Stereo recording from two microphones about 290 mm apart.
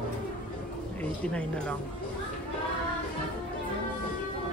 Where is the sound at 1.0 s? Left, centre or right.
Centre.